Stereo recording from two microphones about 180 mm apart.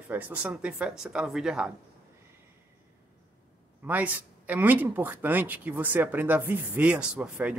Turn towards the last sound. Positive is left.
turn(degrees=-5)  # may be behind; listen again after turning